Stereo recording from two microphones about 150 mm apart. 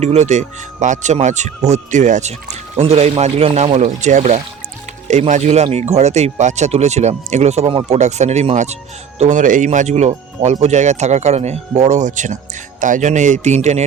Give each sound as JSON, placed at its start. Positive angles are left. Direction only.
{"t": 0.0, "sound": "speech", "side_deg": -50}